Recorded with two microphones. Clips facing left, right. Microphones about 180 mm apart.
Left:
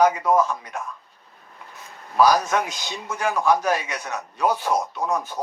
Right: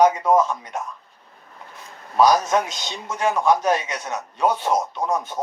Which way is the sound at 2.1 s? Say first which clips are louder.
Right 1 dB; 20° right (ahead or behind).